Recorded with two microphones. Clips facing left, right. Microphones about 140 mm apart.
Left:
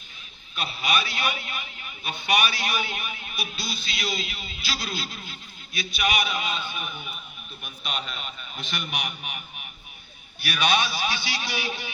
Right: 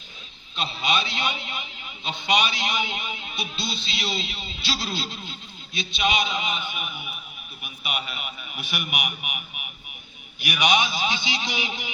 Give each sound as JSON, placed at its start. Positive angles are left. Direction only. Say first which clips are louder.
{"t": 0.5, "sound": "a man's voice", "louder": "right 1 dB", "side_deg": -25}